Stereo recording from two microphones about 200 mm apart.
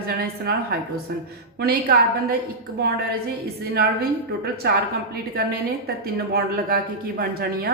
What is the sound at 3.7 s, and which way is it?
A woman's voice, 50° right (ahead or behind).